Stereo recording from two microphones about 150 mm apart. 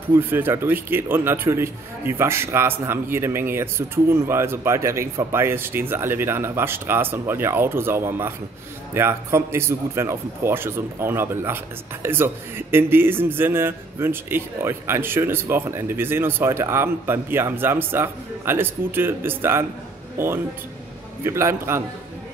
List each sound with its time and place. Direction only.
0.1 s speech: 15° right (ahead or behind)